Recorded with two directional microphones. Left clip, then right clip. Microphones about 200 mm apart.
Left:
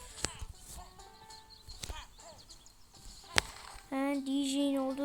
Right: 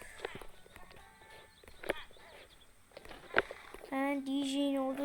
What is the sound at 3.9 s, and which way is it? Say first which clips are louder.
Speech: left 1 dB; 5° left (ahead or behind).